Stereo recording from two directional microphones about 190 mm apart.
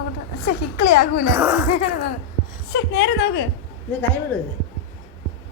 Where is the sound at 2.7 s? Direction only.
65° left (ahead or behind).